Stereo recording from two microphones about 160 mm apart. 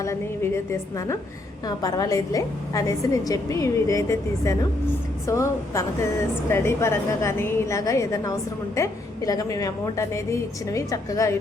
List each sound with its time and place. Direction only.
0.0 s a woman's voice: 15° left (ahead or behind)